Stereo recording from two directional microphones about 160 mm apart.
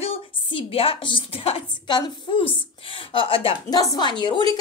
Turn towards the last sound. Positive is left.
turn(degrees=30)  # may be behind; listen again after turning